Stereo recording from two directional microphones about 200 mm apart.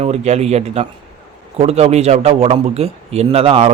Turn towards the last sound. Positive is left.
turn(degrees=-30)  # may be behind; listen again after turning